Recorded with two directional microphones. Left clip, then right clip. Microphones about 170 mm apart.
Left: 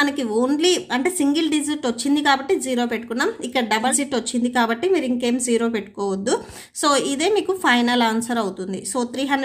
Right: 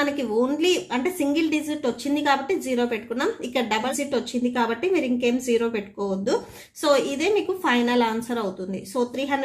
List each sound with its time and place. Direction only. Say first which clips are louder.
0.0 s a woman's voice: left 3 dB; 30° left (ahead or behind)